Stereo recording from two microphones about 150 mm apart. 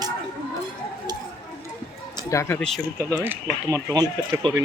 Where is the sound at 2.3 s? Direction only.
15° left (ahead or behind).